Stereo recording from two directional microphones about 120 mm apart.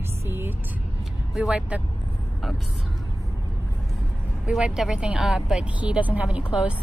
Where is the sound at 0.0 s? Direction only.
20° right (ahead or behind).